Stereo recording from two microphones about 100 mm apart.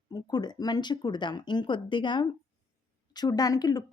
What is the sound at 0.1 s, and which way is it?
Speech, 45° left (ahead or behind).